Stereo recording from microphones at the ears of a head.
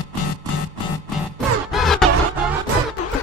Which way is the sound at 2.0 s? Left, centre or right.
Right.